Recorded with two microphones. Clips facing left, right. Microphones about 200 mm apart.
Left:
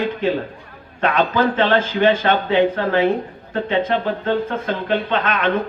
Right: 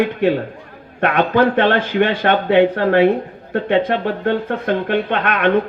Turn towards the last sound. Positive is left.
turn(degrees=-60)  # may be behind; listen again after turning